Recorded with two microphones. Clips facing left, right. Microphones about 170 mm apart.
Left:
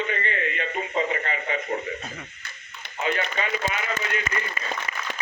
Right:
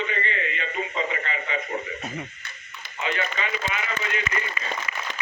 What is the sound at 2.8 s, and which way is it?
Radio, 45° left (ahead or behind).